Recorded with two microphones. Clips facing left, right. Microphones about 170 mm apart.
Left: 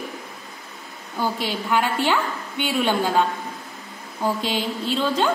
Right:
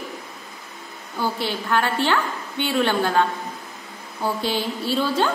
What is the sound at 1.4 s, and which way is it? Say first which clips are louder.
A woman's voice: even; 15° left (ahead or behind).